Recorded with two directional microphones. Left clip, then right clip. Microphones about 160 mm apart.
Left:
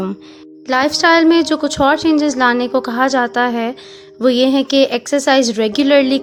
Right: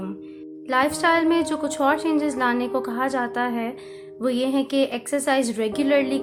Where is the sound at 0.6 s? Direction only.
45° left (ahead or behind).